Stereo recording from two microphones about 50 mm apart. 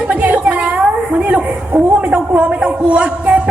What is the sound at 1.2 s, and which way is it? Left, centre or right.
A woman's voice, right.